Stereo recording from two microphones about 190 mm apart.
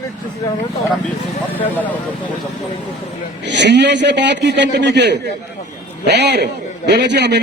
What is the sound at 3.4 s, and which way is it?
A man's voice, 65° right (ahead or behind).